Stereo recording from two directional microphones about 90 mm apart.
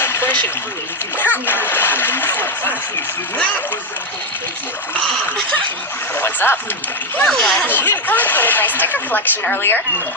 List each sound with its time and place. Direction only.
0.0 s a sound: 25° left (ahead or behind)
1.2 s speech: 20° left (ahead or behind)
6.1 s speech: 25° left (ahead or behind)
7.3 s speech: 5° left (ahead or behind)
7.7 s speech: 20° left (ahead or behind)